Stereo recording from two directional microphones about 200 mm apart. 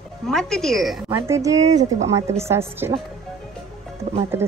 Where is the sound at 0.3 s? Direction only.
Centre (ahead or behind).